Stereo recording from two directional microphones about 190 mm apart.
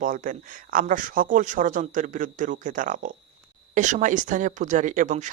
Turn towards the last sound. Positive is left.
turn(degrees=-40)  # may be behind; listen again after turning